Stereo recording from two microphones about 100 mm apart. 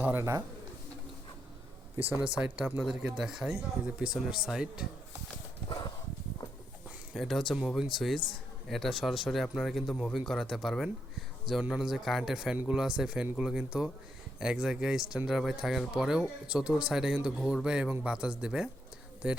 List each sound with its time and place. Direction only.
0.0 s speech: 25° right (ahead or behind)
2.2 s speech: 10° right (ahead or behind)
5.6 s a sound: 45° left (ahead or behind)
7.1 s speech: centre (ahead or behind)